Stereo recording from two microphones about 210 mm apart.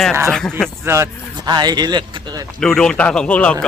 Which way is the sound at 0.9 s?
10° right (ahead or behind).